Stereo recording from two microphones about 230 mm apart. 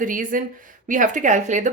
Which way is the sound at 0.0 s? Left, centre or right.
Right.